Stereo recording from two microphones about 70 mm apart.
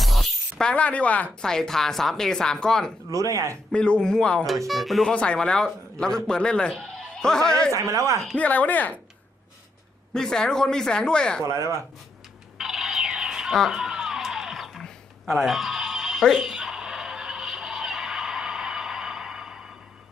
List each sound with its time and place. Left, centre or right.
0.0 s a sound: centre
0.6 s speech: centre
1.4 s speech: centre
3.1 s speech: right
3.7 s speech: centre
4.4 s speech: centre
5.1 s speech: centre
7.7 s speech: right
8.4 s speech: left
10.2 s speech: centre
11.4 s speech: right
12.5 s a sound: centre
13.5 s music: centre
14.8 s a sound: centre